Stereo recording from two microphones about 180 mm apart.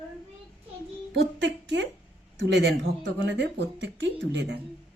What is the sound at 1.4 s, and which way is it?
A woman's voice, 80° right.